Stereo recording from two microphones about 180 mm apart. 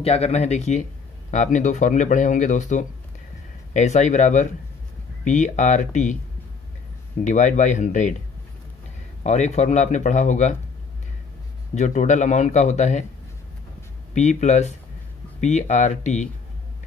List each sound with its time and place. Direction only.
0.0 s speech: 35° left (ahead or behind)
7.2 s speech: 40° left (ahead or behind)
9.2 s speech: 40° left (ahead or behind)
11.7 s speech: 40° left (ahead or behind)
14.1 s speech: 40° left (ahead or behind)